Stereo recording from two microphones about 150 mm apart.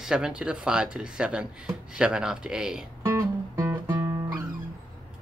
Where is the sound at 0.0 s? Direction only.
5° right (ahead or behind).